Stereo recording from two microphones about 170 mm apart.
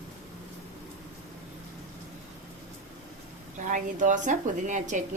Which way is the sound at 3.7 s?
50° right (ahead or behind).